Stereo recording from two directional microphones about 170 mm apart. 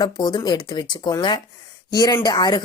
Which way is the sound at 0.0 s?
25° left (ahead or behind).